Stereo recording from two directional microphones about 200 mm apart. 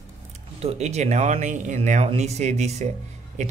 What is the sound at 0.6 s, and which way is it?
Speech, 35° right (ahead or behind).